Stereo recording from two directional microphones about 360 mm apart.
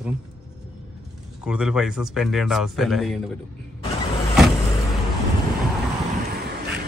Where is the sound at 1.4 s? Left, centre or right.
Centre.